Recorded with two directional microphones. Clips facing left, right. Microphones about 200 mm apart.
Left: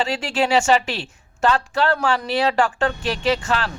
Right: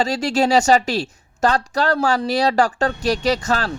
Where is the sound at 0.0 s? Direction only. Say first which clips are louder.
Right 3 dB; 40° right (ahead or behind).